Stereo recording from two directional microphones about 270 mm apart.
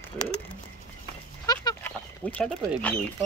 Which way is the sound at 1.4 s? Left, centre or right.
Centre.